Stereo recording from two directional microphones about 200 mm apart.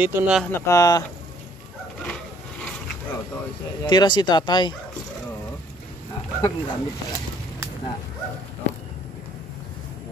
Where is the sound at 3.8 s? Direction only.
20° left (ahead or behind).